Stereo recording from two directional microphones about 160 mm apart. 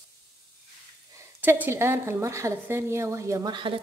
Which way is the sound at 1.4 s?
15° right (ahead or behind).